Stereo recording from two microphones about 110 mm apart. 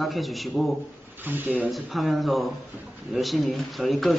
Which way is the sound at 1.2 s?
15° right (ahead or behind).